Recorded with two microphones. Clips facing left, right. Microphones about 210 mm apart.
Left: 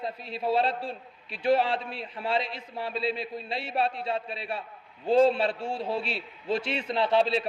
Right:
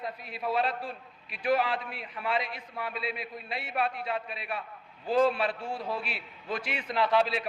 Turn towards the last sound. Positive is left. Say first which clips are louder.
# left 2 dB
turn(degrees=30)  # may be behind; listen again after turning